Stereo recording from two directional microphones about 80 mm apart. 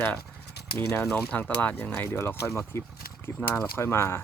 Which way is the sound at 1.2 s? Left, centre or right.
Centre.